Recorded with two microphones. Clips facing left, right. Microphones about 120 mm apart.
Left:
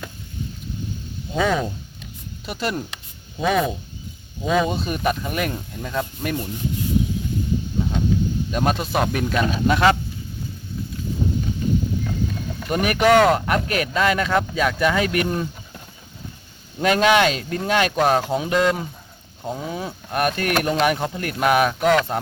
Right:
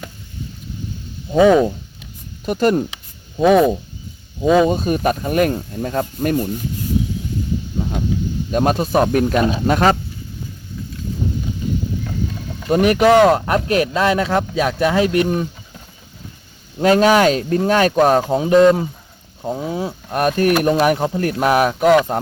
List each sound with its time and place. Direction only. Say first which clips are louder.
1.3 s speech: right 10 dB; 35° right (ahead or behind)
2.5 s speech: right 10 dB; 45° right (ahead or behind)
8.4 s speech: right 9 dB; 40° right (ahead or behind)
12.6 s speech: right 5 dB; 30° right (ahead or behind)
16.8 s speech: right 4 dB; 35° right (ahead or behind)
19.4 s speech: right 5 dB; 20° right (ahead or behind); by 21.9 s 40° right (ahead or behind)